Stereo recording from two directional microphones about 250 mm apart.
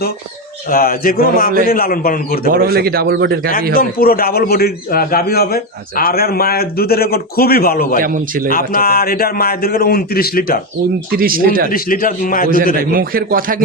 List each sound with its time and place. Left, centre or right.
0.7 s a man's voice: left
2.5 s a man's voice: right
3.8 s a man's voice: left
8.0 s a man's voice: right
8.4 s a man's voice: left
11.7 s a man's voice: left
12.7 s a man's voice: right